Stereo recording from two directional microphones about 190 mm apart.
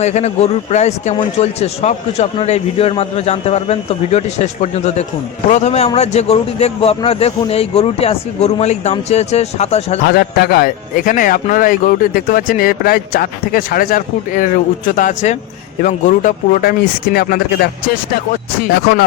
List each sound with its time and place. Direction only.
0.0 s a man's voice: 35° left (ahead or behind)
5.5 s a man's voice: 35° left (ahead or behind)
10.0 s speech: 60° left (ahead or behind)